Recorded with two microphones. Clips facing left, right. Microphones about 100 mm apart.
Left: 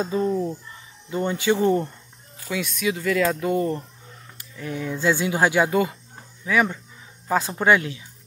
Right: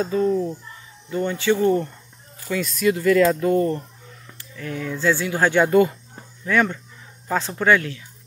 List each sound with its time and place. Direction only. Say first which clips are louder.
0.0 s speech: right 2 dB; 20° left (ahead or behind)
2.4 s speech: right 4 dB; centre (ahead or behind); by 8.0 s 20° left (ahead or behind)